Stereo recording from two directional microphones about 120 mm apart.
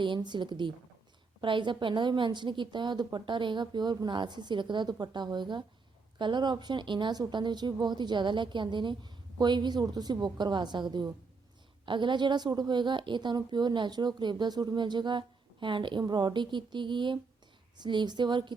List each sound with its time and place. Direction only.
0.0 s a woman's voice: 40° right (ahead or behind)